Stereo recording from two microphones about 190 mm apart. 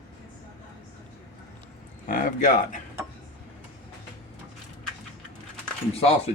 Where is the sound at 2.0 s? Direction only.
45° left (ahead or behind).